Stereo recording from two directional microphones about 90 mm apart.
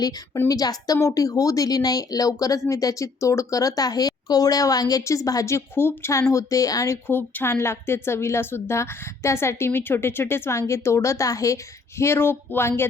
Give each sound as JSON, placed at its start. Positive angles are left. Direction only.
{"t": 0.4, "sound": "a woman's voice", "side_deg": 45}